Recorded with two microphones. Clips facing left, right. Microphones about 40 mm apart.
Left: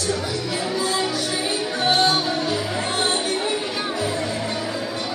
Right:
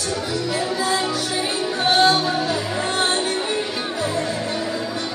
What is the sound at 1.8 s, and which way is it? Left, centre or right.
Music, centre.